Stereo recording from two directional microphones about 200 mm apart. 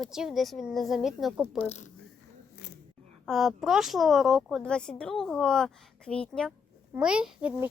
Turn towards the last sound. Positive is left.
turn(degrees=-5)  # may be behind; listen again after turning